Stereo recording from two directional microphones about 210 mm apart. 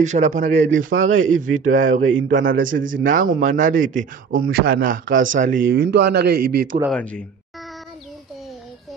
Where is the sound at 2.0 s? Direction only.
65° right (ahead or behind).